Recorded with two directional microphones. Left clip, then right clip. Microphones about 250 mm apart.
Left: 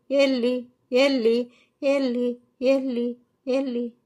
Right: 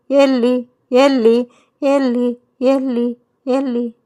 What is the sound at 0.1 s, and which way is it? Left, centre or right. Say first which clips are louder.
Speech: right 8 dB; right.